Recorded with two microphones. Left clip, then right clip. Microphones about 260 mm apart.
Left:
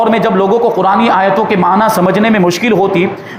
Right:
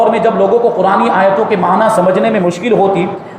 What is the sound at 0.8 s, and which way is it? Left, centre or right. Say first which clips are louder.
A man's voice: even; left.